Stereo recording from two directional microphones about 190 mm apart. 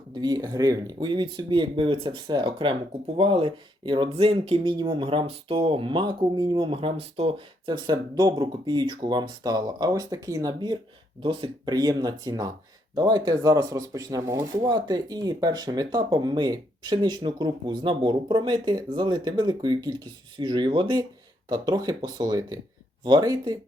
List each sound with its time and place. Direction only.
0.1 s speech: 20° right (ahead or behind)